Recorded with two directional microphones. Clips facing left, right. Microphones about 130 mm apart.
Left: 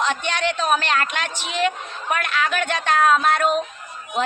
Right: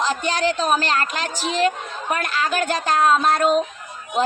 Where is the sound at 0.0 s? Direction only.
35° right (ahead or behind).